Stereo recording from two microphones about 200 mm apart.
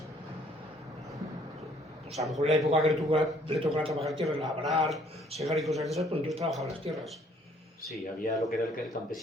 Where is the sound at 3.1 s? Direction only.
25° right (ahead or behind).